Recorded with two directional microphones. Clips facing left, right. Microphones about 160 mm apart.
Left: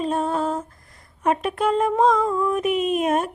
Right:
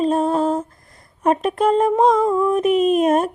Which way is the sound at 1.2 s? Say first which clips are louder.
Right 4 dB; 35° right (ahead or behind).